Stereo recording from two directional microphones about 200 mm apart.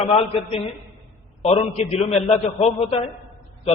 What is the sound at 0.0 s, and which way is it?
A man's voice, 30° left (ahead or behind).